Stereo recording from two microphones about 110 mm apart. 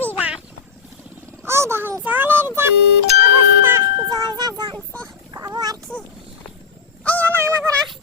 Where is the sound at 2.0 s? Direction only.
20° right (ahead or behind).